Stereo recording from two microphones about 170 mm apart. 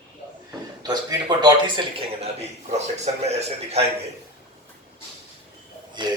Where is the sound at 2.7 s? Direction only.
40° right (ahead or behind).